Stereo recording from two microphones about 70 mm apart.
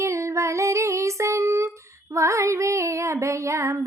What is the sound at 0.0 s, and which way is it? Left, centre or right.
Female singing, right.